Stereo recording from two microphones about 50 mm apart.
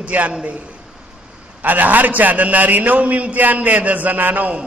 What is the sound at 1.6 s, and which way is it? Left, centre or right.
A man's voice, right.